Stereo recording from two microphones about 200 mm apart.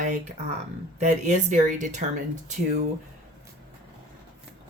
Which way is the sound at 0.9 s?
35° right (ahead or behind).